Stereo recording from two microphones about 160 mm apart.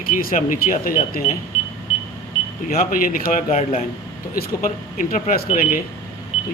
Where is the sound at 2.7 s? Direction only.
60° left (ahead or behind).